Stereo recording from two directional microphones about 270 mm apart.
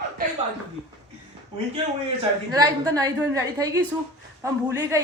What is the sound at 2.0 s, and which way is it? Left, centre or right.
A woman's voice, centre.